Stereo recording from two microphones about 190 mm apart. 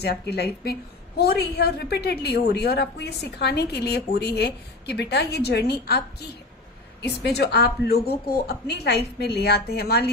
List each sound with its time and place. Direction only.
0.0 s a woman's voice: 60° left (ahead or behind)
7.0 s a woman's voice: 60° left (ahead or behind)